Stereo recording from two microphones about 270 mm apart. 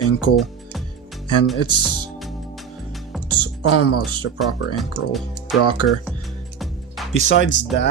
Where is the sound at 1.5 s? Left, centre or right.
Left.